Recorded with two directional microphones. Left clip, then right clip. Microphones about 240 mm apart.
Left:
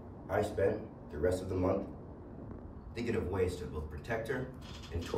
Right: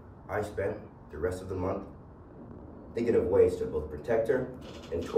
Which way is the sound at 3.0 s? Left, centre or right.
Right.